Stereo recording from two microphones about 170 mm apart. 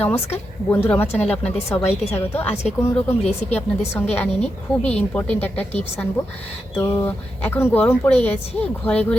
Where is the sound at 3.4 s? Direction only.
40° left (ahead or behind).